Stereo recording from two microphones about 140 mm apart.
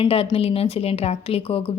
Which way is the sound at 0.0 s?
45° left (ahead or behind).